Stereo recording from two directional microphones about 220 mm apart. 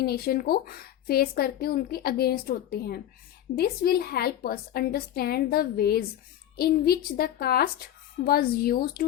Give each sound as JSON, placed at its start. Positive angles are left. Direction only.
{"t": 0.0, "sound": "speech", "side_deg": 45}